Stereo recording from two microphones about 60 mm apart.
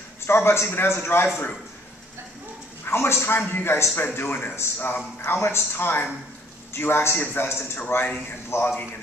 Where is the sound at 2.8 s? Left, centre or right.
Left.